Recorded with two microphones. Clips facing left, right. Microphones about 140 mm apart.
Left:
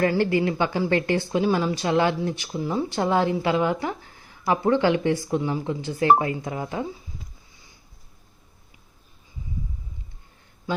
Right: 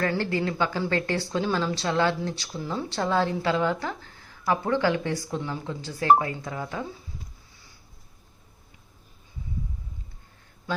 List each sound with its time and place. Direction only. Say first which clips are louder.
0.0 s a woman's voice: left 5 dB; 15° left (ahead or behind)